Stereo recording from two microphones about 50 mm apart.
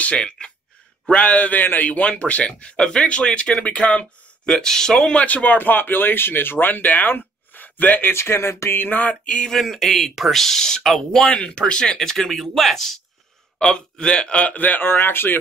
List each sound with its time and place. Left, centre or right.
0.0 s speech: left
1.9 s speech: left
4.5 s speech: centre
5.2 s speech: left
8.1 s speech: left
8.7 s speech: left
9.2 s speech: left
9.5 s speech: centre
11.2 s speech: left